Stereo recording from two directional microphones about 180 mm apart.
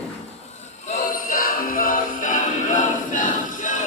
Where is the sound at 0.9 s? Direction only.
50° left (ahead or behind).